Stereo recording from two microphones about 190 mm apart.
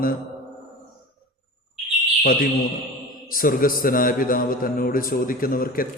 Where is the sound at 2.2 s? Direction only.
50° left (ahead or behind).